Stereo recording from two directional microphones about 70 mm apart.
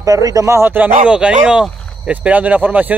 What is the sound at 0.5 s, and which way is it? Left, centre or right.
Speech, right.